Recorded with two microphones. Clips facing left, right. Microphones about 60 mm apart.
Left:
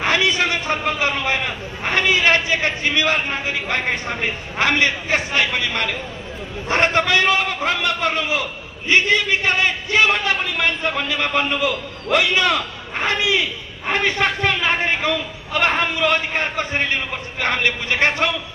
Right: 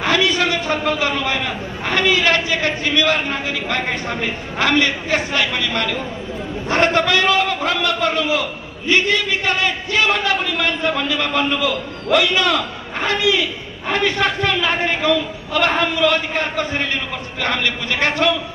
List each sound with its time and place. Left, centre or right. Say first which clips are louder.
0.0 s a man's voice: right 1 dB; left